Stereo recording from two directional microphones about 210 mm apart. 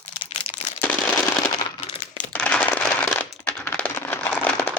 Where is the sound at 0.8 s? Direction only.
5° left (ahead or behind).